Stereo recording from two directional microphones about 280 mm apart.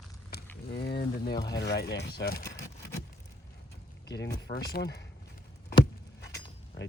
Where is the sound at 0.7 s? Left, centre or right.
Left.